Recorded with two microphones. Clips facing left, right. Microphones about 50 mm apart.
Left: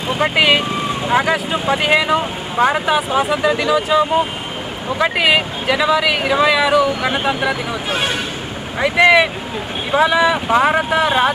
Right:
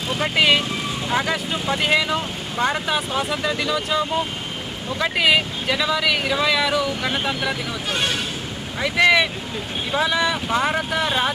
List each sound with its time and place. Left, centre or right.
0.1 s speech: centre
7.9 s speech: centre